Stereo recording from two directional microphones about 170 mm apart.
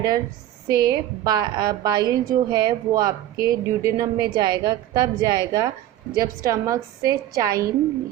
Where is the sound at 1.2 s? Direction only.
25° right (ahead or behind).